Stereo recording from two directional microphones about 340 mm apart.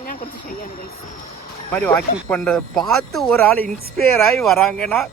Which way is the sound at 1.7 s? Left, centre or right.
Centre.